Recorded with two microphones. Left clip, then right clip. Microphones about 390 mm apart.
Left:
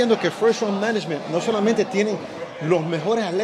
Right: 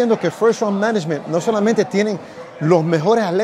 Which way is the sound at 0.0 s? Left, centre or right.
Right.